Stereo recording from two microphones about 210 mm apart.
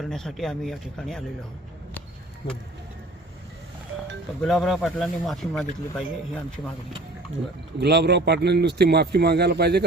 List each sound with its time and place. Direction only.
0.0 s speech: centre (ahead or behind)
4.4 s speech: centre (ahead or behind)
7.8 s speech: 55° right (ahead or behind)